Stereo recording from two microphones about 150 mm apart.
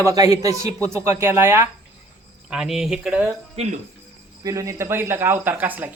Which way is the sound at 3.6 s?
45° right (ahead or behind).